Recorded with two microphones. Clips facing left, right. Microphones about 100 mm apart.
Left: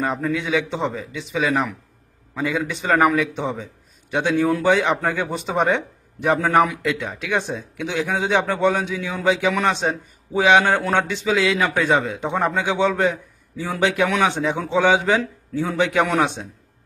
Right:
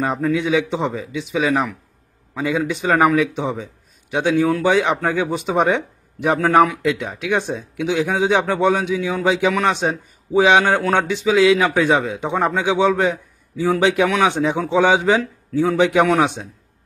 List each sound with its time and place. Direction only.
0.0 s a man's voice: 15° right (ahead or behind)